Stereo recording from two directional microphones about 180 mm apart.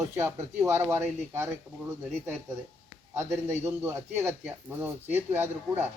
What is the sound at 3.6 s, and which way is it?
Speech, 15° right (ahead or behind).